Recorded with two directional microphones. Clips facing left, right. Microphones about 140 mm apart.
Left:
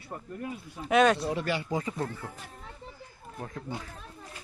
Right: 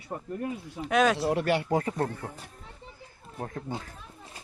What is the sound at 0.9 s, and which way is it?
Speech, centre (ahead or behind).